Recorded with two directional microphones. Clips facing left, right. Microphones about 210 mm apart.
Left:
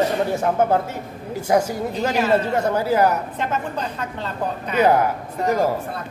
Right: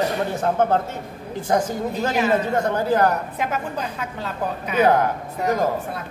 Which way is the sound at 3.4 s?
10° right (ahead or behind).